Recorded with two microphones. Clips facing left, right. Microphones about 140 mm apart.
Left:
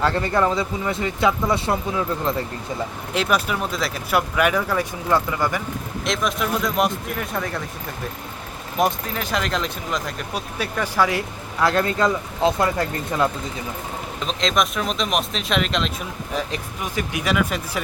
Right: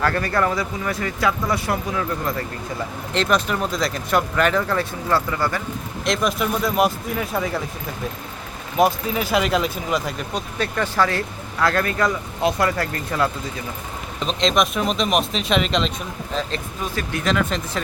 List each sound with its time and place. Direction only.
0.0 s speech: 25° left (ahead or behind)
3.1 s speech: 10° left (ahead or behind)
6.1 s speech: centre (ahead or behind)
8.8 s speech: 5° right (ahead or behind)
10.3 s speech: 10° left (ahead or behind)
14.3 s speech: centre (ahead or behind)
16.3 s speech: 15° left (ahead or behind)